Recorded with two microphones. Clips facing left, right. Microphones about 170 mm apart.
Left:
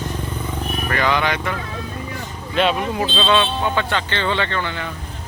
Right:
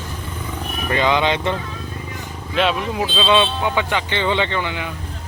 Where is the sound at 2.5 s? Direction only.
Centre (ahead or behind).